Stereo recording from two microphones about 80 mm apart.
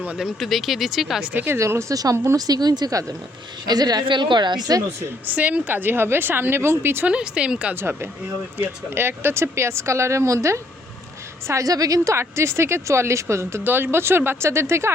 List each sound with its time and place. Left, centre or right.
0.2 s speech: centre
1.2 s a woman's voice: right
1.5 s a woman's voice: right
5.2 s a woman's voice: right
7.1 s speech: centre
8.6 s a woman's voice: right
12.2 s speech: right